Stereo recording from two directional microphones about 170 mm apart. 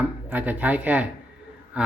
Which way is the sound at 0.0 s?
10° right (ahead or behind).